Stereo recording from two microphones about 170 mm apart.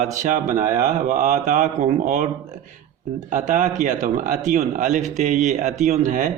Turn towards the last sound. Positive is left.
turn(degrees=-50)  # may be behind; listen again after turning